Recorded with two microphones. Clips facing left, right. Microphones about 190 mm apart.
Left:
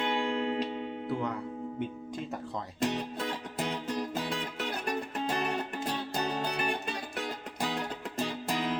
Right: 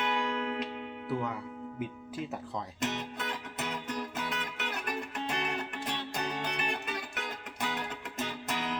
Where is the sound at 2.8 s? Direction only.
30° left (ahead or behind).